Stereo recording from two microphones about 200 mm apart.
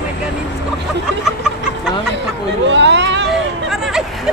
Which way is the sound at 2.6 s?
65° right (ahead or behind).